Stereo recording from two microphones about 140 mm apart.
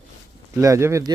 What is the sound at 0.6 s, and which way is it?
Speech, 20° right (ahead or behind).